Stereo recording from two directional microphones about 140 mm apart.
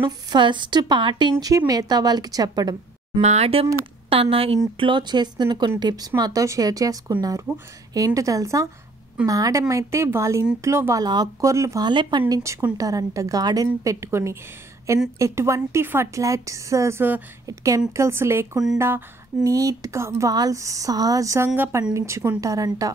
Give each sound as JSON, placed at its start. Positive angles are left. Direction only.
{"t": 0.3, "sound": "a woman's voice", "side_deg": -35}
{"t": 1.3, "sound": "a woman's voice", "side_deg": -25}
{"t": 3.2, "sound": "a woman's voice", "side_deg": -50}
{"t": 12.4, "sound": "a woman's voice", "side_deg": -20}